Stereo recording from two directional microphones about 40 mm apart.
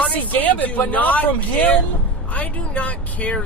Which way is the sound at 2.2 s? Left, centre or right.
Left.